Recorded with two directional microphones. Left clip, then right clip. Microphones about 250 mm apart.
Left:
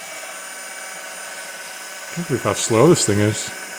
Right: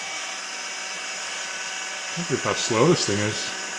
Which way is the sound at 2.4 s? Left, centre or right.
Left.